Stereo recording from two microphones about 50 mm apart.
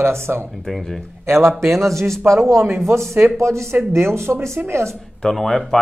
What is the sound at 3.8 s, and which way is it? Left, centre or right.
Speech, right.